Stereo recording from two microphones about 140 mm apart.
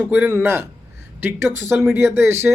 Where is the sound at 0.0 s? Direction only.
15° right (ahead or behind).